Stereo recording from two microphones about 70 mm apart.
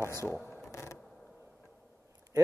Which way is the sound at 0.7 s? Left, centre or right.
Left.